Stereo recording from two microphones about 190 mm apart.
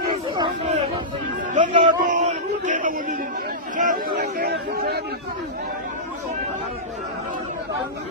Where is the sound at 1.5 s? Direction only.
40° right (ahead or behind).